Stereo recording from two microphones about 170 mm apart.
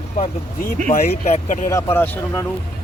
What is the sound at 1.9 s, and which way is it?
Speech, 10° left (ahead or behind).